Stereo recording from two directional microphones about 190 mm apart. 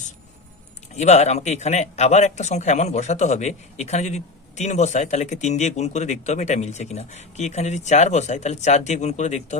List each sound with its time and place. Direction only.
0.9 s speech: 35° left (ahead or behind)